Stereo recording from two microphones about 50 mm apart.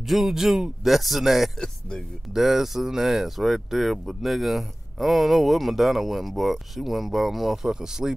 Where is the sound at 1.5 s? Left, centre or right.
Centre.